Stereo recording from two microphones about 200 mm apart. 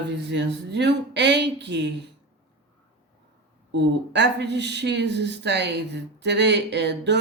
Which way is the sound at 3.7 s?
60° right (ahead or behind).